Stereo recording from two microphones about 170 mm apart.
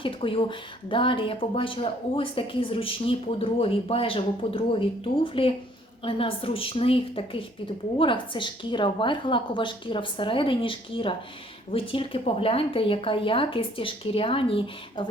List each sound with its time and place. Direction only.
0.0 s a woman's voice: 30° left (ahead or behind)